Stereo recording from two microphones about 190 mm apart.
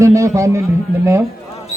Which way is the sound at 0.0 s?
15° right (ahead or behind).